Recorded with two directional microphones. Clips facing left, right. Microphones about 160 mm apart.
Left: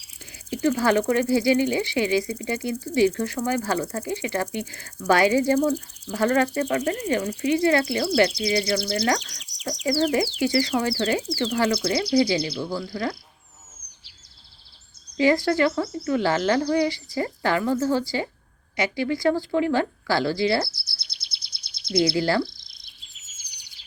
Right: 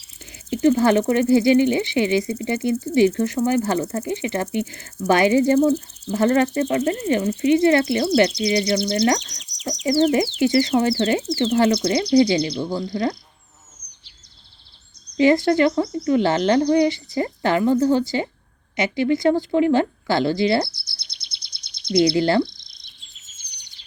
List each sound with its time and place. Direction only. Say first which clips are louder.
0.6 s speech: right 5 dB; 25° right (ahead or behind)
5.5 s speech: right 5 dB; 10° left (ahead or behind)
6.1 s speech: right 3 dB; 25° right (ahead or behind)
8.8 s speech: right 5 dB; 5° left (ahead or behind)
9.3 s bird: right 2 dB; 5° left (ahead or behind)
9.8 s speech: right 4 dB; 25° right (ahead or behind)
12.4 s speech: right 5 dB; 5° left (ahead or behind)
12.9 s speech: right 5 dB; 20° right (ahead or behind)
15.2 s speech: right 4 dB; 20° right (ahead or behind)
20.7 s chirp: even; 5° left (ahead or behind)
21.9 s speech: right 4 dB; 25° right (ahead or behind)
22.4 s bird: even; 5° left (ahead or behind)